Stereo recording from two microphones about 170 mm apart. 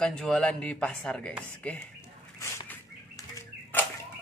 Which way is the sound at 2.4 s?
20° left (ahead or behind).